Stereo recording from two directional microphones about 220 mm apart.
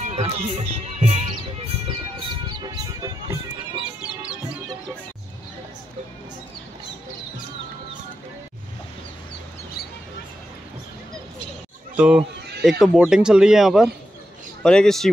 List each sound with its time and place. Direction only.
0.0 s speech: 30° right (ahead or behind)
2.6 s speech: 15° right (ahead or behind)
4.0 s music: 5° right (ahead or behind)
12.0 s speech: 5° right (ahead or behind)